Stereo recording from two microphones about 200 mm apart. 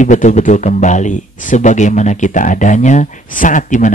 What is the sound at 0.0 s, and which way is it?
Speech, 40° left (ahead or behind).